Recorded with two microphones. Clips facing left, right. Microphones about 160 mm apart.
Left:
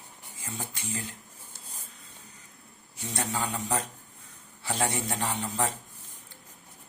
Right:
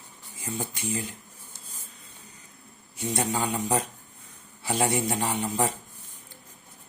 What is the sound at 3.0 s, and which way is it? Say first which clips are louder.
A man's voice: right 5 dB; 15° right (ahead or behind).